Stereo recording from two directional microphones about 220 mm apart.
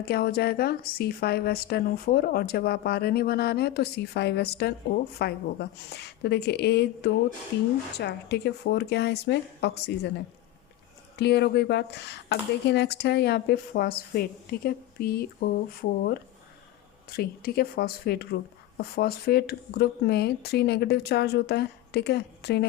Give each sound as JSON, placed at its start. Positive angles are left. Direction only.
{"t": 0.0, "sound": "speech", "side_deg": 45}
{"t": 11.2, "sound": "speech", "side_deg": 50}